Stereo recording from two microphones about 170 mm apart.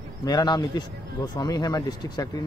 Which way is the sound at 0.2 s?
25° left (ahead or behind).